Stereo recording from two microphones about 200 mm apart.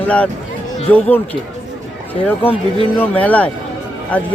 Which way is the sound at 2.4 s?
30° left (ahead or behind).